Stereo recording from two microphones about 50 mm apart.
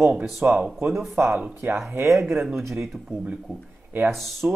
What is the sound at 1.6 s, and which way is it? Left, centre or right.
Speech, right.